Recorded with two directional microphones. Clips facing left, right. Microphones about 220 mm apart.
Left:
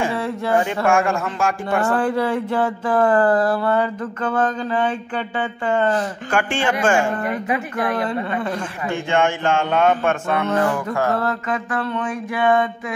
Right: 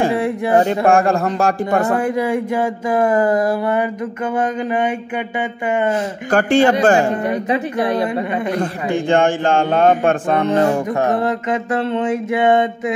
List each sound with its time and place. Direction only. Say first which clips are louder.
0.6 s speech: right 5 dB; 35° right (ahead or behind)
1.9 s a sound: right 2 dB; 15° right (ahead or behind)
6.3 s speech: right 8 dB; 40° right (ahead or behind)
7.2 s a man's voice: right 4 dB; 20° right (ahead or behind)
8.1 s a sound: right 3 dB; 15° right (ahead or behind)
8.5 s a man's voice: right 6 dB; 35° right (ahead or behind)